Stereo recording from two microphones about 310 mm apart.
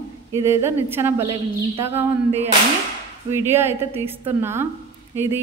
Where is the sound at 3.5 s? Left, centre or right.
Centre.